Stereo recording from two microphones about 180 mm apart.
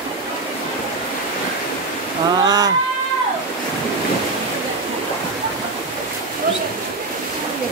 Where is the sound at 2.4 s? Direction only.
20° right (ahead or behind).